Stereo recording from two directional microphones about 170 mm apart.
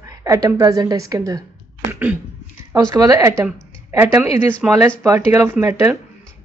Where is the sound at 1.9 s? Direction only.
10° right (ahead or behind).